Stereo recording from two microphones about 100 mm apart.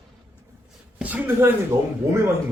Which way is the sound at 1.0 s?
15° right (ahead or behind).